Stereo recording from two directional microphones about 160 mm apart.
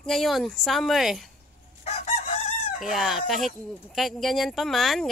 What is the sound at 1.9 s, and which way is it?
Chicken, 40° left (ahead or behind).